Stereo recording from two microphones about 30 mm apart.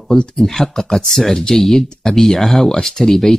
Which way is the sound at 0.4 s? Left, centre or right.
Centre.